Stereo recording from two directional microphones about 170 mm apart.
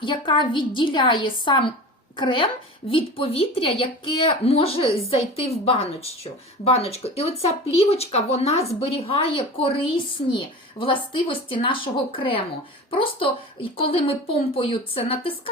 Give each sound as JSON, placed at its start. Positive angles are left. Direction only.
{"t": 0.0, "sound": "a woman's voice", "side_deg": 30}